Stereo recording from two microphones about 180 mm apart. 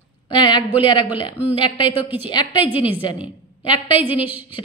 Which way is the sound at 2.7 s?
10° right (ahead or behind).